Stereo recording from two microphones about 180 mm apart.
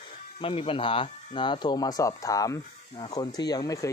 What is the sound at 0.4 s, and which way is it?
Speech, 30° left (ahead or behind).